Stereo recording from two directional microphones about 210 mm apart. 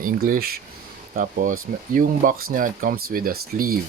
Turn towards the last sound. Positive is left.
turn(degrees=-45)  # may be behind; listen again after turning